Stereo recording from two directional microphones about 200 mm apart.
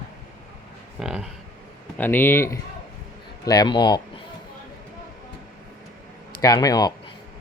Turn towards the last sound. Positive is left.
turn(degrees=20)  # may be behind; listen again after turning